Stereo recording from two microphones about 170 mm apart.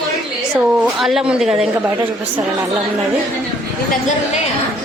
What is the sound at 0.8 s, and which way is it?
A woman's voice, centre (ahead or behind).